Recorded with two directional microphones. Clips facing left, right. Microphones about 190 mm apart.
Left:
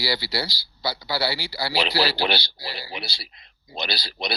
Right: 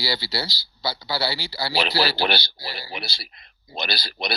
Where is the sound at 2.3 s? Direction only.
50° right (ahead or behind).